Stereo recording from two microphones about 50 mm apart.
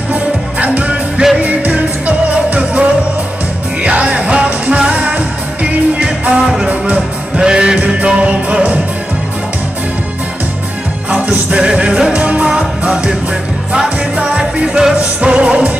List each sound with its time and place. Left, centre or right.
0.1 s music: right
6.4 s music: centre
11.1 s music: right
15.0 s music: right